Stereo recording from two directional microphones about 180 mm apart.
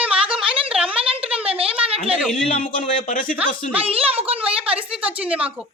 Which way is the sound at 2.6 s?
50° left (ahead or behind).